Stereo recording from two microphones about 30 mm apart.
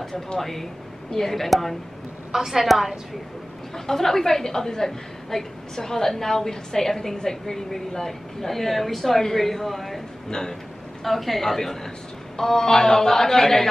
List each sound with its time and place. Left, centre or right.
0.4 s a woman's voice: centre
2.3 s a woman's voice: centre
3.7 s a woman's voice: centre
11.1 s a woman's voice: centre